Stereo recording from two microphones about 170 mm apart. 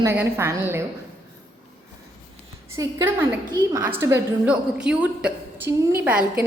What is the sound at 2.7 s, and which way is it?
A woman's voice, 20° right (ahead or behind).